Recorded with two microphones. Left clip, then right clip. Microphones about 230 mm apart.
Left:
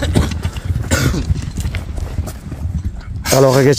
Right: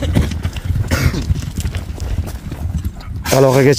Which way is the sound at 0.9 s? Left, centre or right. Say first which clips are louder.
Left 2 dB; left.